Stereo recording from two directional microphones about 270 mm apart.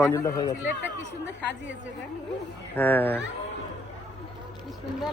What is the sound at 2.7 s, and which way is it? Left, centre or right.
Speech, centre.